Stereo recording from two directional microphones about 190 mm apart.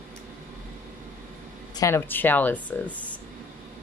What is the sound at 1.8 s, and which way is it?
Speech, 10° left (ahead or behind).